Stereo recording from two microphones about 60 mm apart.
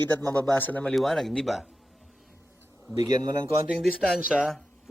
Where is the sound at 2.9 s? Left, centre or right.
Right.